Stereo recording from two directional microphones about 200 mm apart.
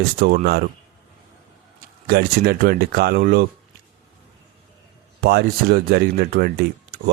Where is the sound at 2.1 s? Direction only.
50° right (ahead or behind).